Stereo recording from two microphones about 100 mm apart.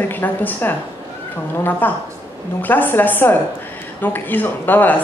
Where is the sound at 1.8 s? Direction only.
20° left (ahead or behind).